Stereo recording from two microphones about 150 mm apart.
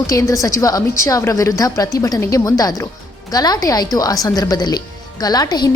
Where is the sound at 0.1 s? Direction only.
20° left (ahead or behind).